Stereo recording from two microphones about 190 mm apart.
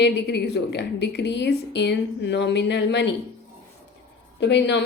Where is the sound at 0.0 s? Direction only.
65° left (ahead or behind).